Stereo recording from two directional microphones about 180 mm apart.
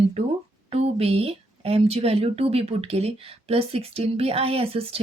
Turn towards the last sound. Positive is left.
turn(degrees=-35)  # may be behind; listen again after turning